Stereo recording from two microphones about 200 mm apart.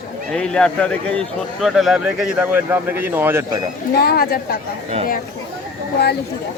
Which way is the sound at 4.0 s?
50° left (ahead or behind).